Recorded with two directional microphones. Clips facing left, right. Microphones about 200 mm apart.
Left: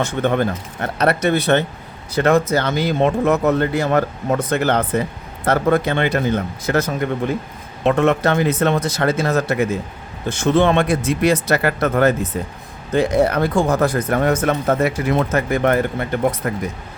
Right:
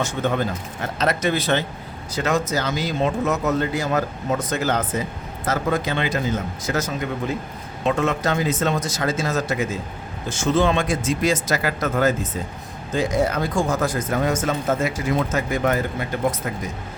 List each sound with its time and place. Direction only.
0.0 s speech: 60° left (ahead or behind)